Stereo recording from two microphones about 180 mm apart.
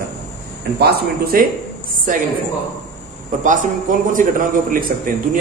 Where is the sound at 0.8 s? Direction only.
60° right (ahead or behind).